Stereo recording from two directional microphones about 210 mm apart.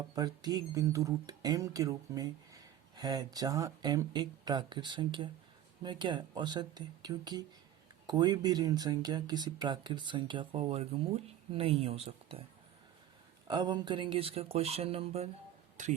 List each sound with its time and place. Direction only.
0.2 s speech: 20° right (ahead or behind)
13.5 s speech: 20° right (ahead or behind)